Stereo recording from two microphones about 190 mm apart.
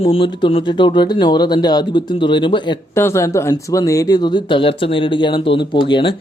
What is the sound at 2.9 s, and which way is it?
Speech, 15° left (ahead or behind).